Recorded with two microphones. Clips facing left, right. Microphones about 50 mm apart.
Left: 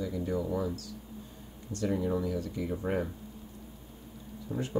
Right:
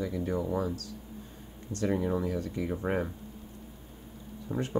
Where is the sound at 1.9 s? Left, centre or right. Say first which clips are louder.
Right 1 dB; right.